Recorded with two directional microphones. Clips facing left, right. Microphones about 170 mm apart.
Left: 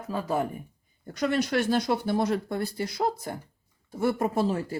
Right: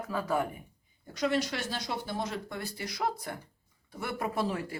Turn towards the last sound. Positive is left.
turn(degrees=35)  # may be behind; listen again after turning